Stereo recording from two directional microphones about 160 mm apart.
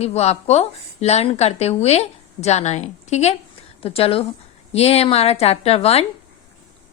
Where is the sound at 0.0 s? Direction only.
40° left (ahead or behind).